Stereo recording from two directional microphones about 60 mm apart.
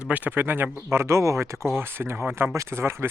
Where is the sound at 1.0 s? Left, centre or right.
Right.